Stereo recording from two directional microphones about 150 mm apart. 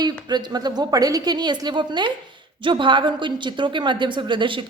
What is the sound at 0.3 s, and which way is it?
A woman's voice, 30° right (ahead or behind).